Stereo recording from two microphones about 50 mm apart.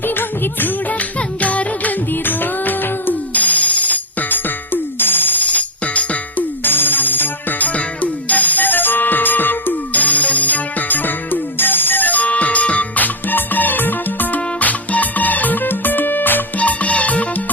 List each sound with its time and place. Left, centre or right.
0.2 s music: left
6.7 s music: left